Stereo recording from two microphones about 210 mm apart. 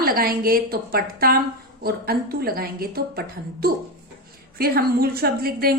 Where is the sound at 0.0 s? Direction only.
45° right (ahead or behind).